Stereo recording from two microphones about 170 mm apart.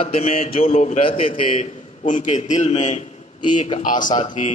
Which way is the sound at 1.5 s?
45° left (ahead or behind).